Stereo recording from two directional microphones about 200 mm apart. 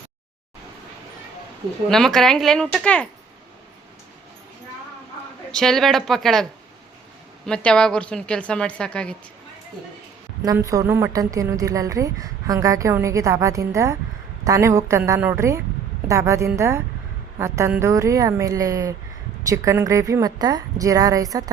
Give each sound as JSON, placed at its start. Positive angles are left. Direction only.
{"t": 1.9, "sound": "a woman's voice", "side_deg": 0}
{"t": 5.5, "sound": "a woman's voice", "side_deg": 0}
{"t": 10.4, "sound": "a woman's voice", "side_deg": -15}